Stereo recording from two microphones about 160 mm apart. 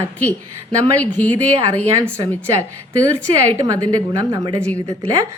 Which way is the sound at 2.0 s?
15° right (ahead or behind).